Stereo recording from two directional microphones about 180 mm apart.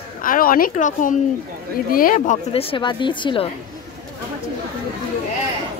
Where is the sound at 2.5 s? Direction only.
25° left (ahead or behind).